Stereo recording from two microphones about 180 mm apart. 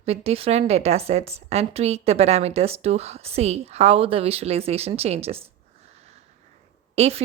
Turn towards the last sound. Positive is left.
turn(degrees=-35)  # may be behind; listen again after turning